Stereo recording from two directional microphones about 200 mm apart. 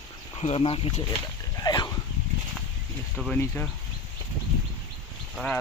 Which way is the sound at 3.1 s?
Centre (ahead or behind).